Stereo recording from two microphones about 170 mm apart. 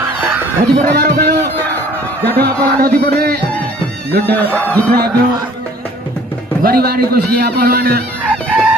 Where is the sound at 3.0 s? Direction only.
70° right (ahead or behind).